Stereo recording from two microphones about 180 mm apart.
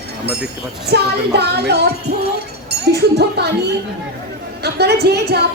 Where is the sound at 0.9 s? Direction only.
65° right (ahead or behind).